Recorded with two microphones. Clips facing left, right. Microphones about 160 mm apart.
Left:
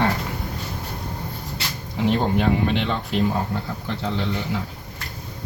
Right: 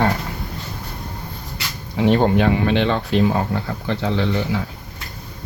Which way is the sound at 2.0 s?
70° right (ahead or behind).